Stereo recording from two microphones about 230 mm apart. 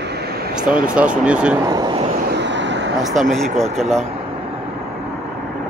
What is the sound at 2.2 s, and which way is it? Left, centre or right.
Vehicle, right.